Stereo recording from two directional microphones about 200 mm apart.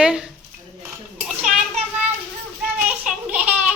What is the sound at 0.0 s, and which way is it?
Speech, 5° right (ahead or behind).